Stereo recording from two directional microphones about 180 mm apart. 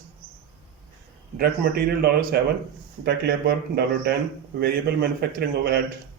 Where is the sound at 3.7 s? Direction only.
60° right (ahead or behind).